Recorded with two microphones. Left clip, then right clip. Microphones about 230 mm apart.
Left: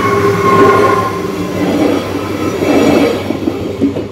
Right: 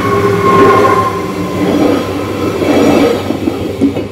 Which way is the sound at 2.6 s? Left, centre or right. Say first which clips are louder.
Right 1 dB; centre.